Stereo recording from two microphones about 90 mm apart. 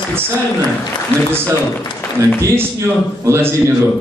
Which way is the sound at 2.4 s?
25° right (ahead or behind).